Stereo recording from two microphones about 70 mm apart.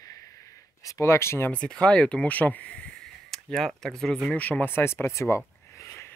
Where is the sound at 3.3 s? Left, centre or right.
Centre.